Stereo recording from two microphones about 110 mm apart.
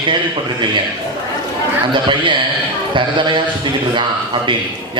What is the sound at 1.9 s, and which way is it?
A man's voice, 45° right (ahead or behind).